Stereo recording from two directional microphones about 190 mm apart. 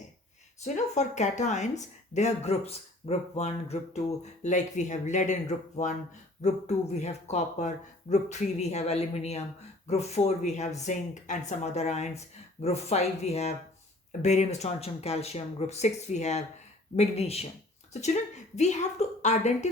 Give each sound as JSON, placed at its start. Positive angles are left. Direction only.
{"t": 0.6, "sound": "speech", "side_deg": 40}